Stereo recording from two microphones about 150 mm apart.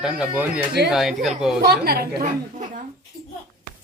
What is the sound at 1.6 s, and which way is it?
Speech, 90° right.